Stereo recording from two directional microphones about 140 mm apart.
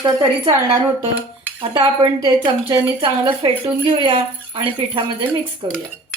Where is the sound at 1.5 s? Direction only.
35° right (ahead or behind).